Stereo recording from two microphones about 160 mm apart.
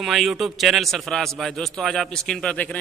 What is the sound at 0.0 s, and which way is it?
A man's voice, centre (ahead or behind).